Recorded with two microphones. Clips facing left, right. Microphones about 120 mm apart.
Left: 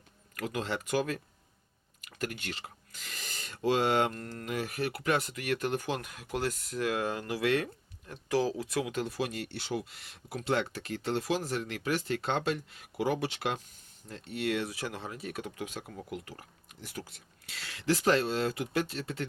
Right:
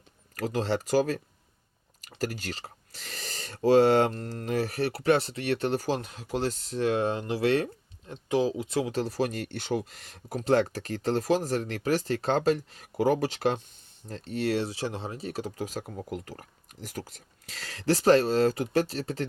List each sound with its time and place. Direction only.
0.3 s speech: 35° right (ahead or behind)